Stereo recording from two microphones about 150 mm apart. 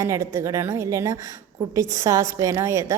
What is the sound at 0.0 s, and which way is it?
A woman's voice, 20° right (ahead or behind).